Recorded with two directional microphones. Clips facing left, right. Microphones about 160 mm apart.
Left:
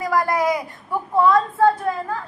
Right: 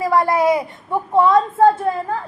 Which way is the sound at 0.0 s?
25° right (ahead or behind).